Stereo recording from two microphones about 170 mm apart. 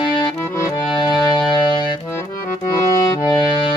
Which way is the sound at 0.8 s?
25° left (ahead or behind).